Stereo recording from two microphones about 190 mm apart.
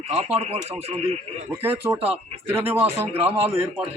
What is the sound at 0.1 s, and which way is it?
Speech, 30° right (ahead or behind).